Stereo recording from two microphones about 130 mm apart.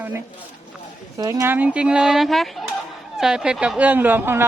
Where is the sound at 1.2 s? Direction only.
25° right (ahead or behind).